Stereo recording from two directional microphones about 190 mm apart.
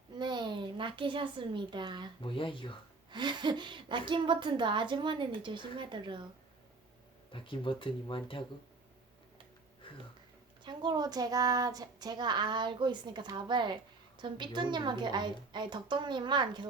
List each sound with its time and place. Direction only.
0.2 s speech: 25° right (ahead or behind)
2.2 s speech: 25° left (ahead or behind)
3.1 s speech: 25° right (ahead or behind)
7.3 s speech: 25° left (ahead or behind)
9.8 s a sound: 25° left (ahead or behind)
10.6 s speech: 25° right (ahead or behind)